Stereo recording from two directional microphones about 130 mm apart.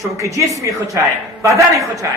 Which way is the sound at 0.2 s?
25° right (ahead or behind).